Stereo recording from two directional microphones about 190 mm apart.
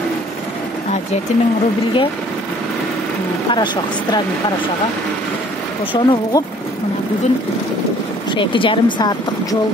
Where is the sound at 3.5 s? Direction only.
25° left (ahead or behind).